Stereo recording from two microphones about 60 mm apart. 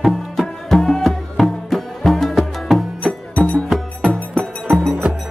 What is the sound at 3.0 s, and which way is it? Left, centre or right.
Music, left.